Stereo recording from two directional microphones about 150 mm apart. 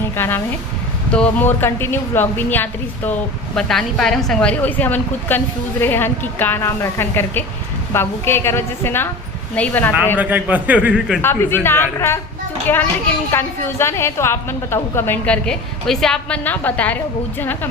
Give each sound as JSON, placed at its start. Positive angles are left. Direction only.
{"t": 0.2, "sound": "a woman's voice", "side_deg": 15}
{"t": 10.2, "sound": "a man's voice", "side_deg": -10}
{"t": 11.2, "sound": "a woman's voice", "side_deg": 15}